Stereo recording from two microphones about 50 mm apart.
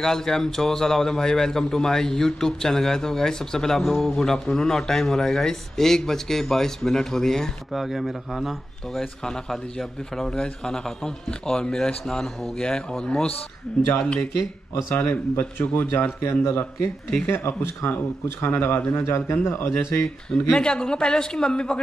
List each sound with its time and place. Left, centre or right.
0.0 s a man's voice: centre
7.7 s a man's voice: centre; by 14.2 s left
15.0 s speech: left
16.2 s a man's voice: left
20.2 s a man's voice: centre